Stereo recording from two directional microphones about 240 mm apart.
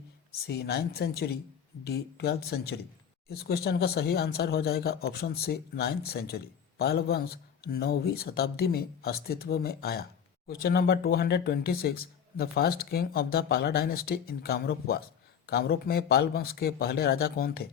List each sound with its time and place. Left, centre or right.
0.4 s speech: left